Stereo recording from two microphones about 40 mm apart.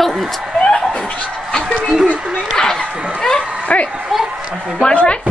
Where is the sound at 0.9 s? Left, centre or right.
Left.